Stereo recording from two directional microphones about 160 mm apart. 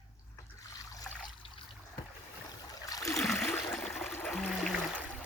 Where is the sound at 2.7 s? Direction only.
25° left (ahead or behind).